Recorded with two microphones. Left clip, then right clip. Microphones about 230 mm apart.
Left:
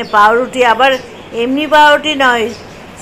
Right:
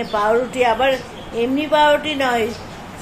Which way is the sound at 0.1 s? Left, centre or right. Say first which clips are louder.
Left 9 dB; centre.